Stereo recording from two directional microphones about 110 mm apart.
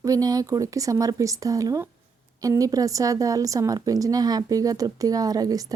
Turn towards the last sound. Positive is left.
turn(degrees=-35)  # may be behind; listen again after turning